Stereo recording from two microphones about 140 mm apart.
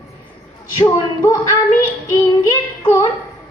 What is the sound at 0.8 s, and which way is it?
A man's voice, 20° left (ahead or behind).